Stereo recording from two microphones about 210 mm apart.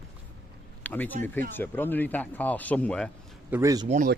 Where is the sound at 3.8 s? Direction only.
35° right (ahead or behind).